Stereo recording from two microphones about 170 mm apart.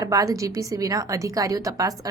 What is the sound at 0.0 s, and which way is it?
A woman's voice, 20° right (ahead or behind).